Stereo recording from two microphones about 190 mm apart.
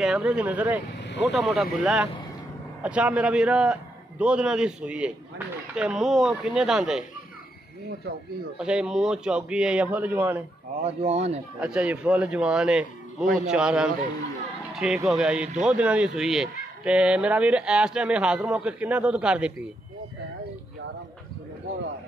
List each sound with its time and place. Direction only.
0.0 s speech: 5° right (ahead or behind)
0.9 s vehicle: 65° left (ahead or behind)
1.3 s speech: centre (ahead or behind)
8.5 s speech: 5° right (ahead or behind)
10.8 s speech: 35° right (ahead or behind)
11.6 s speech: 5° right (ahead or behind)
14.7 s a sound: centre (ahead or behind)
15.0 s speech: 5° right (ahead or behind)